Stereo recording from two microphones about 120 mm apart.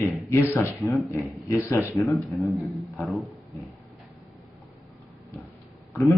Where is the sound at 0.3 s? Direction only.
25° left (ahead or behind).